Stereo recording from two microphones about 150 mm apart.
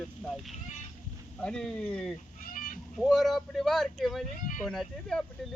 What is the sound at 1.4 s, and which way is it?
Speech, 5° left (ahead or behind).